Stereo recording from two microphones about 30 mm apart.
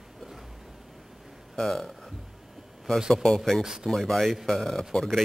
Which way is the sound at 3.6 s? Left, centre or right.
Centre.